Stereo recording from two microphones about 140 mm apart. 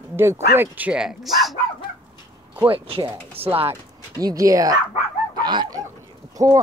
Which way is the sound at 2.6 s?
45° right (ahead or behind).